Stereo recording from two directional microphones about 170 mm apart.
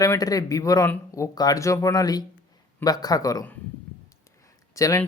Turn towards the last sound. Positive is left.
turn(degrees=20)  # may be behind; listen again after turning